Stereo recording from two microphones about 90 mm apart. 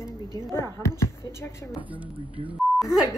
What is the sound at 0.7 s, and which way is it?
Speech, 30° left (ahead or behind).